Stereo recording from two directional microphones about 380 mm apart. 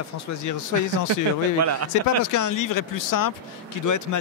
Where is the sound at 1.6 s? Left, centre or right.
Right.